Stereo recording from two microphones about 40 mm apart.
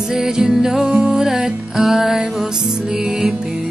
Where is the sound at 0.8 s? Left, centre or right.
Right.